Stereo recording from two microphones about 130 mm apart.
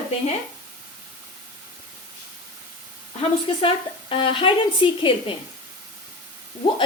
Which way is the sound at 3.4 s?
45° left (ahead or behind).